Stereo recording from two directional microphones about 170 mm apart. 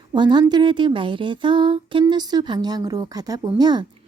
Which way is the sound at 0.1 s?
25° right (ahead or behind).